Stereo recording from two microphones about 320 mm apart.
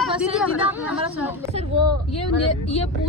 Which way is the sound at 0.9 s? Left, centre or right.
Centre.